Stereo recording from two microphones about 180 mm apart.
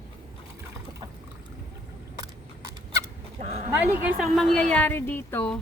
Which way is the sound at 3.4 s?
40° right (ahead or behind).